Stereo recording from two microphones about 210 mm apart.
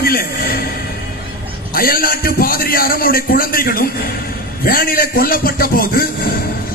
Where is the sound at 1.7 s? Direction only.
45° left (ahead or behind).